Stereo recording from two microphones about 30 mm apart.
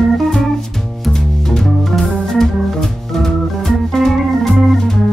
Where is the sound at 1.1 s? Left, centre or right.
Centre.